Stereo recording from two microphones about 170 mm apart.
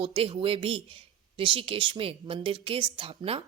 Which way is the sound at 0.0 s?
35° right (ahead or behind).